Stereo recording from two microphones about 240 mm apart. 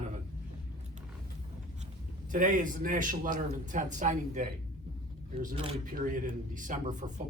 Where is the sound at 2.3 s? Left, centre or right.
Right.